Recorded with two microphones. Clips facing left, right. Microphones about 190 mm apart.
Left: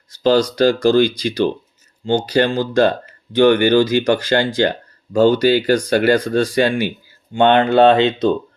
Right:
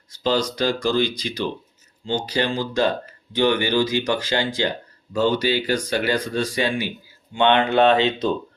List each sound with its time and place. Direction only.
0.2 s speech: 55° left (ahead or behind)
2.0 s speech: 55° left (ahead or behind); by 8.3 s 35° left (ahead or behind)